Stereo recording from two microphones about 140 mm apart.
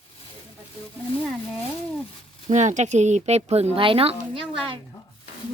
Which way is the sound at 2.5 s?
60° right (ahead or behind).